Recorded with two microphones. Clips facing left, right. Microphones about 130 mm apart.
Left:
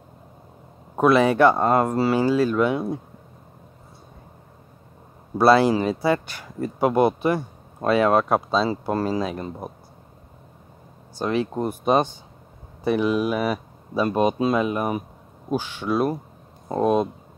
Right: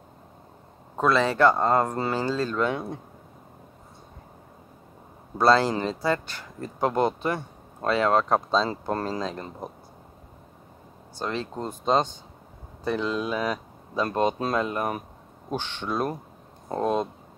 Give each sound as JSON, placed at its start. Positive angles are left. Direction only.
{"t": 0.9, "sound": "speech", "side_deg": 15}
{"t": 5.4, "sound": "speech", "side_deg": 15}
{"t": 11.1, "sound": "speech", "side_deg": 15}